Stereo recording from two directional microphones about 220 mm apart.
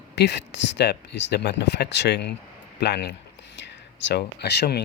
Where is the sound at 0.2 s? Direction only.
50° left (ahead or behind).